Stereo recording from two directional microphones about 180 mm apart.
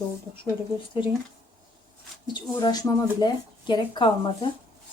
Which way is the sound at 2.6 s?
20° left (ahead or behind).